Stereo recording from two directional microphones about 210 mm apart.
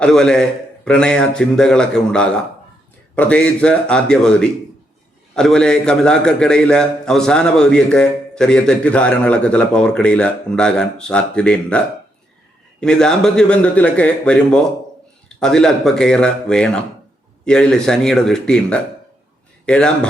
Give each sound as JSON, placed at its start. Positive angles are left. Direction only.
{"t": 0.0, "sound": "a man's voice", "side_deg": 5}
{"t": 12.8, "sound": "a man's voice", "side_deg": 5}